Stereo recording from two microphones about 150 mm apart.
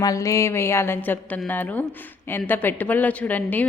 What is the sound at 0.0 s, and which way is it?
A woman's voice, 25° left (ahead or behind).